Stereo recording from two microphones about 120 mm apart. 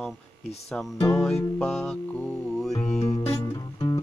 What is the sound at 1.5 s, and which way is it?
Music, 5° left (ahead or behind).